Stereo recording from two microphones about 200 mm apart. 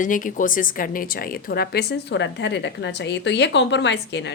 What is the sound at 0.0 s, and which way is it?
A woman's voice, 40° left (ahead or behind).